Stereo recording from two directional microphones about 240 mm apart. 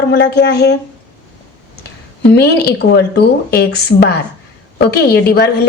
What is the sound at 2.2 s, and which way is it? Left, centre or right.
A woman's voice, left.